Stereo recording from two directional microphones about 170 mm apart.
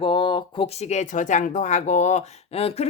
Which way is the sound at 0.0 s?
30° left (ahead or behind).